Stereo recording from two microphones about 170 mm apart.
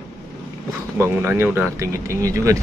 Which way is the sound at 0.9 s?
15° right (ahead or behind).